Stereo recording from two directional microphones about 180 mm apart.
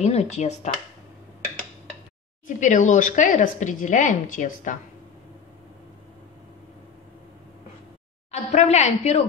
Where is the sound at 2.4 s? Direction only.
45° left (ahead or behind).